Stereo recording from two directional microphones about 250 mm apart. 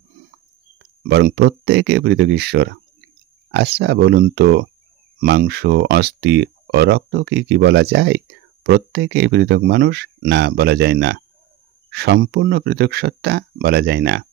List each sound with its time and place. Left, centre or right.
1.0 s speech: right